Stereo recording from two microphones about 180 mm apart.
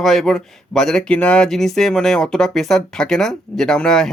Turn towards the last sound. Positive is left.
turn(degrees=5)  # may be behind; listen again after turning